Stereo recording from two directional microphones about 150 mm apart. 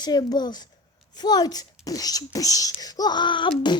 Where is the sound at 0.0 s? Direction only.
30° left (ahead or behind).